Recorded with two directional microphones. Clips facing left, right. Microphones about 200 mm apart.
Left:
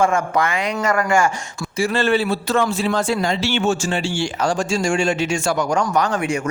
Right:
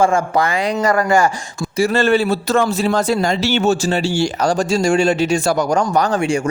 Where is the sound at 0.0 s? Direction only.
30° right (ahead or behind).